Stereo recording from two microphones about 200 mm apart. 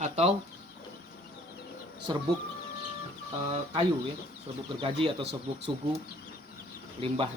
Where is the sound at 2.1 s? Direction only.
25° right (ahead or behind).